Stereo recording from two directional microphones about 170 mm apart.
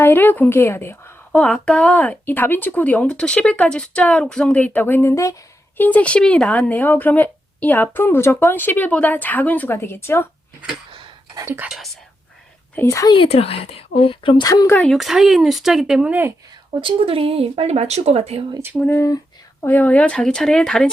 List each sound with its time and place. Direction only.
0.0 s a woman's voice: 10° left (ahead or behind)
10.9 s whispering: 20° right (ahead or behind)
12.7 s speech: 15° left (ahead or behind)
13.1 s a woman's voice: 35° left (ahead or behind)
14.8 s speech: centre (ahead or behind)
16.8 s speech: 30° right (ahead or behind)
18.5 s speech: 15° right (ahead or behind)
18.8 s speech: 15° left (ahead or behind)